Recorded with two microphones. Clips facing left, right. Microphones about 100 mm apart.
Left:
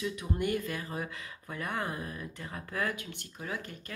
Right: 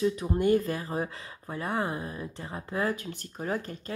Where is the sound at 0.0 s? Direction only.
35° right (ahead or behind).